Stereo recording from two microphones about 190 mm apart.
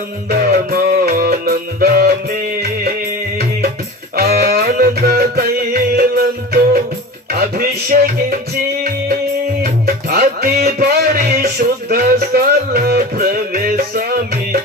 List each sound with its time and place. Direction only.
0.3 s music: 50° right (ahead or behind)
4.1 s music: 55° right (ahead or behind)
9.8 s music: 50° right (ahead or behind)